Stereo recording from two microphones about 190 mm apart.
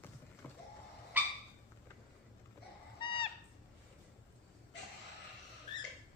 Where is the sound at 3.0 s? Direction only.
25° left (ahead or behind).